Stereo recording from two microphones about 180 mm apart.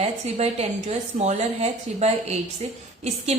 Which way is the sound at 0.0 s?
35° right (ahead or behind).